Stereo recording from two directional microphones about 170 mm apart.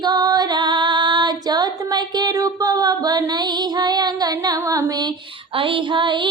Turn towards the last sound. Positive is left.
turn(degrees=-30)  # may be behind; listen again after turning